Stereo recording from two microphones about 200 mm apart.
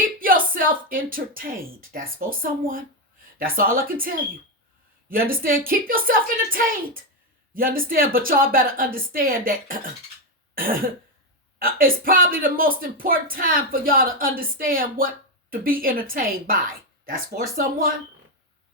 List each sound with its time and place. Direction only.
0.2 s speech: 45° right (ahead or behind)
10.5 s cough: 45° right (ahead or behind)
11.6 s speech: 45° right (ahead or behind)